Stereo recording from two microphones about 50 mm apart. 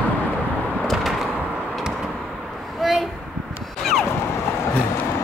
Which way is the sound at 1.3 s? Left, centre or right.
Centre.